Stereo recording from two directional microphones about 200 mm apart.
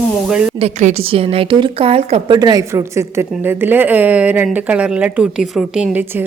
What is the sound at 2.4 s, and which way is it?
A woman's voice, 20° right (ahead or behind).